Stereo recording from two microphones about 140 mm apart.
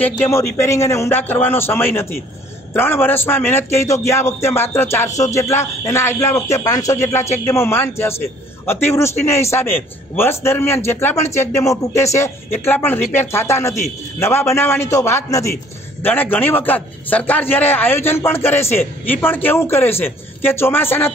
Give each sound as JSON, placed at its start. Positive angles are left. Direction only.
{"t": 0.0, "sound": "a man's voice", "side_deg": 15}